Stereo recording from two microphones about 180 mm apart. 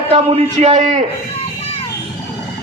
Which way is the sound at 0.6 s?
40° right (ahead or behind).